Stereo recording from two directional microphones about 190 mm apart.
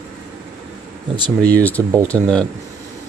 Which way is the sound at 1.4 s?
10° left (ahead or behind).